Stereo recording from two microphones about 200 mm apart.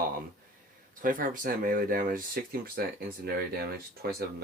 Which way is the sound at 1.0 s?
45° right (ahead or behind).